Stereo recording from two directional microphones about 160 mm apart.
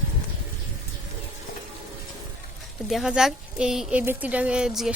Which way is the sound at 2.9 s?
5° right (ahead or behind).